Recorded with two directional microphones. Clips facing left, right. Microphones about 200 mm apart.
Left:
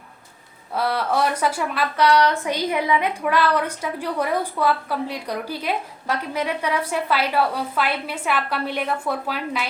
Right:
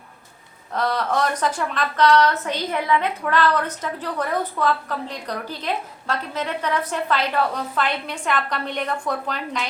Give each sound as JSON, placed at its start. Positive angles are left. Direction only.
{"t": 0.7, "sound": "a woman's voice", "side_deg": 10}